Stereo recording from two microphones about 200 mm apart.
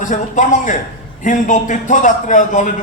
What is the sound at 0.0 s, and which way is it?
A man's voice, 40° left (ahead or behind).